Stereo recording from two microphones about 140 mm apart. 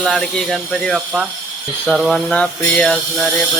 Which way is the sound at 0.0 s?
Centre (ahead or behind).